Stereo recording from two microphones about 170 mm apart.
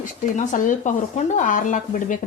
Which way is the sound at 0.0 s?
50° left (ahead or behind).